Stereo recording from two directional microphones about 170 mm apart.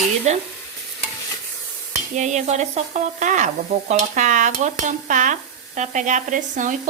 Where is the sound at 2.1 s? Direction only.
45° right (ahead or behind).